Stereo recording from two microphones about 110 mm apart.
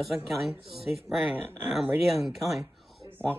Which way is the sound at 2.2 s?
Centre (ahead or behind).